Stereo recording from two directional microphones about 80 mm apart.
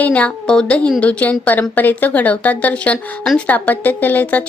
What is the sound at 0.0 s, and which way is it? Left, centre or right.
Speech, centre.